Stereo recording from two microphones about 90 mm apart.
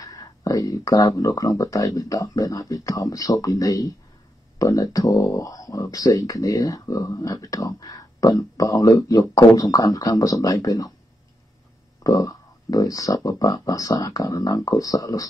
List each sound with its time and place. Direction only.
0.0 s speech: 40° left (ahead or behind)
5.1 s speech: 25° left (ahead or behind)
5.4 s speech: 40° left (ahead or behind)
12.0 s speech: 45° left (ahead or behind)